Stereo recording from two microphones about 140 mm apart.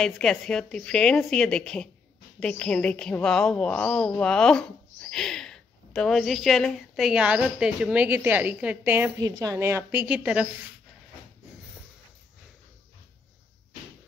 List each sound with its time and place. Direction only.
0.0 s a woman's voice: 5° left (ahead or behind); by 9.1 s 15° right (ahead or behind)
9.2 s a woman's voice: 25° right (ahead or behind); by 10.5 s 10° right (ahead or behind)